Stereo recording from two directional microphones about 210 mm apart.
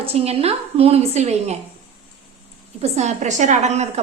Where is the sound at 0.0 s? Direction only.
30° right (ahead or behind).